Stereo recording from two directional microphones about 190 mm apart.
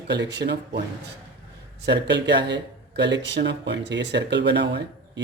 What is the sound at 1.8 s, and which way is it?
Speech, 65° right (ahead or behind).